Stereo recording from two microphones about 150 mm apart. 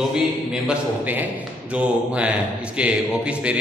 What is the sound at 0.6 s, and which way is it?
A man's voice, 10° right (ahead or behind).